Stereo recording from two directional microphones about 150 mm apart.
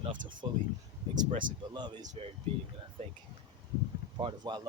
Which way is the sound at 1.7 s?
30° right (ahead or behind).